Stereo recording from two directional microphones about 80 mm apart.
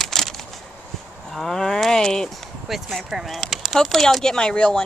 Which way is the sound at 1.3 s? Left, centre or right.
Centre.